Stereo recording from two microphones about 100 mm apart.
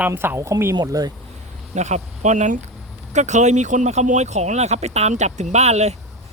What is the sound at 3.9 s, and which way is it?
Speech, 90° right.